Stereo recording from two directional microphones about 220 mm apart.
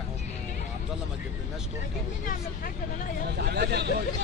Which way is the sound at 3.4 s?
50° right (ahead or behind).